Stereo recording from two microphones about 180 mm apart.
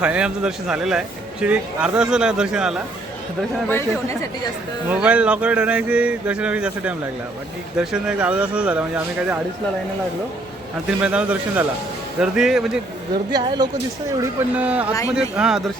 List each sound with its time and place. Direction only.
0.0 s speech: 5° right (ahead or behind)
4.9 s speech: 5° right (ahead or behind)
10.8 s speech: 5° right (ahead or behind)
13.3 s speech: 25° right (ahead or behind)
14.2 s speech: 10° right (ahead or behind)